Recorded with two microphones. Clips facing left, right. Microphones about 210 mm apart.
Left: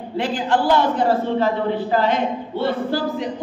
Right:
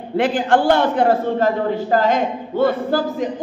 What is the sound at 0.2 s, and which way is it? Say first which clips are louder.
A man's voice: right 4 dB; 55° right (ahead or behind).